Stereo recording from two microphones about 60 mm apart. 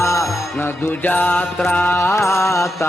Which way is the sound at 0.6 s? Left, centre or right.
Left.